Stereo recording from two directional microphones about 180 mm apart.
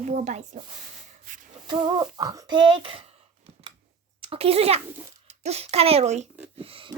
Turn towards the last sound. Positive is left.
turn(degrees=-30)  # may be behind; listen again after turning